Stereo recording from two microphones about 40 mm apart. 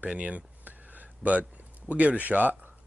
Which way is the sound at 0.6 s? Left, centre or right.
Right.